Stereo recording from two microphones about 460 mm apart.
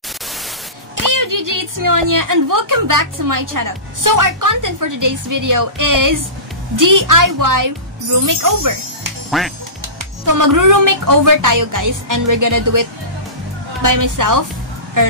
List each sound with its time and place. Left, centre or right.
0.9 s a woman's voice: right
9.3 s speech: centre
10.2 s a woman's voice: right
13.8 s a woman's voice: right